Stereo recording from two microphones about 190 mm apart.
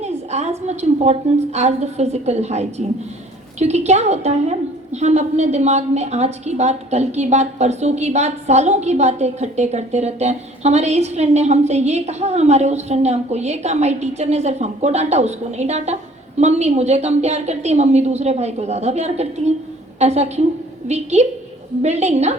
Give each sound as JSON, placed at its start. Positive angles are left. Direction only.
{"t": 0.0, "sound": "a woman's voice", "side_deg": -35}